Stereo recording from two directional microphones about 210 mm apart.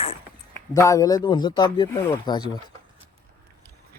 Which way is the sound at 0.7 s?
15° left (ahead or behind).